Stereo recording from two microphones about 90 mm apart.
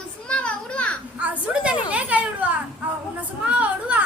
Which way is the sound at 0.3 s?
10° left (ahead or behind).